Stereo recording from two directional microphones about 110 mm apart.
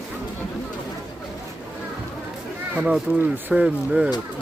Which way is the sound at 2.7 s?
10° right (ahead or behind).